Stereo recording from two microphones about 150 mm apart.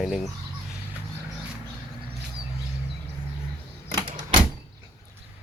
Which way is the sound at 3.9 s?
30° right (ahead or behind).